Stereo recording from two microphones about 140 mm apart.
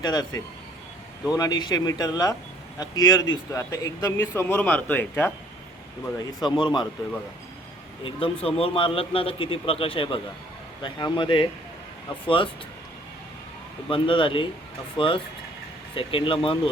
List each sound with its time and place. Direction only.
0.0 s a man's voice: 30° left (ahead or behind); by 5.3 s 15° left (ahead or behind)
6.1 s a man's voice: 30° left (ahead or behind)
8.0 s a man's voice: 40° left (ahead or behind)
13.9 s a man's voice: 40° left (ahead or behind)